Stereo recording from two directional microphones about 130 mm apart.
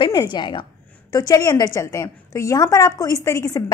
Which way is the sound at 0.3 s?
35° left (ahead or behind).